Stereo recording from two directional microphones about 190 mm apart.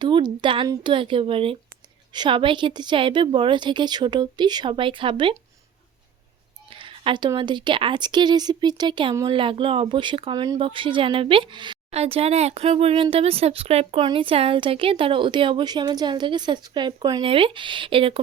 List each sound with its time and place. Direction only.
0.0 s a woman's voice: 25° right (ahead or behind)
6.7 s a woman's voice: 25° right (ahead or behind)